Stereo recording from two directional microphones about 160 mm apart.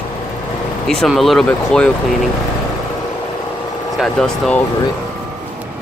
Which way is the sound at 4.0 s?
5° left (ahead or behind).